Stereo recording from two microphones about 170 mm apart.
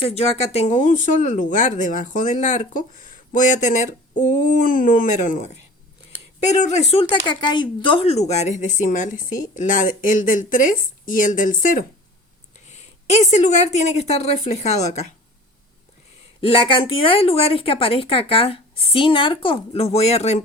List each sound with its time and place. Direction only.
0.0 s speech: 35° left (ahead or behind)
7.0 s speech: 25° left (ahead or behind)
16.4 s speech: 30° left (ahead or behind)